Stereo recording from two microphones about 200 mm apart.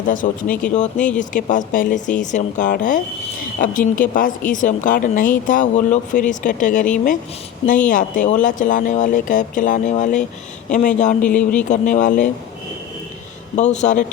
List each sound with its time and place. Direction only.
0.1 s speech: 40° left (ahead or behind)
0.9 s speech: 5° left (ahead or behind)
1.2 s speech: 40° left (ahead or behind)
7.9 s speech: 40° left (ahead or behind)
11.2 s speech: 5° left (ahead or behind)
11.7 s speech: 40° left (ahead or behind)
13.6 s speech: 35° left (ahead or behind)